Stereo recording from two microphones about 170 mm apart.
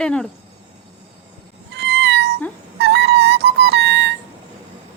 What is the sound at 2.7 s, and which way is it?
Music, 75° right (ahead or behind).